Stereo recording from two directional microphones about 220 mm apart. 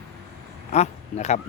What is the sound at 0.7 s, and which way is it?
Speech, 30° left (ahead or behind).